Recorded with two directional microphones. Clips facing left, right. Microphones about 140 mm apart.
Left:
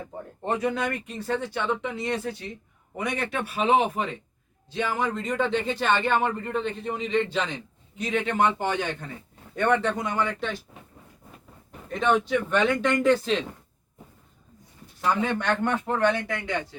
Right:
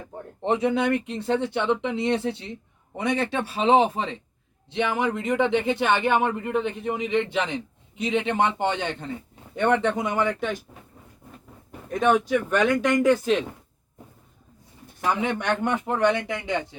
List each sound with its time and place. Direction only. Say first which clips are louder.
0.4 s speech: right 4 dB; 20° right (ahead or behind)
11.9 s speech: right 2 dB; 10° right (ahead or behind)
15.0 s speech: even; 15° right (ahead or behind)